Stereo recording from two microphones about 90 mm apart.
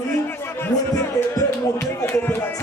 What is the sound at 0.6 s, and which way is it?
Speech, 25° left (ahead or behind).